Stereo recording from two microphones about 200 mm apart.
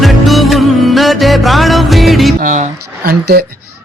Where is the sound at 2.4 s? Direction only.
40° right (ahead or behind).